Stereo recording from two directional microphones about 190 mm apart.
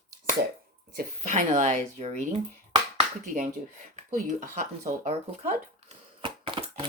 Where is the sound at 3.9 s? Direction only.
40° right (ahead or behind).